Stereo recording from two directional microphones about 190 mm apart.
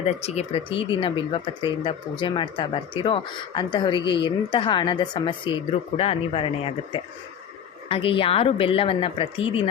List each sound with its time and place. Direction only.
0.2 s speech: 35° left (ahead or behind)